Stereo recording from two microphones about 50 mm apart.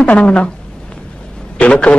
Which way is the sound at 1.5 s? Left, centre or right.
Left.